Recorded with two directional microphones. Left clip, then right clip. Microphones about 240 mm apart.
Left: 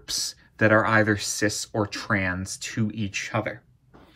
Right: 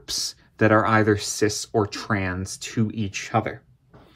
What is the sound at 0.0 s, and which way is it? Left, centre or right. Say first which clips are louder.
Speech: right 1 dB; right.